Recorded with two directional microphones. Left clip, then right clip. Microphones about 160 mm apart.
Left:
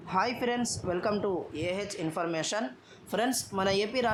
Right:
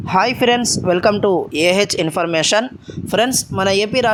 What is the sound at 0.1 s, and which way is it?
Speech, 55° right (ahead or behind).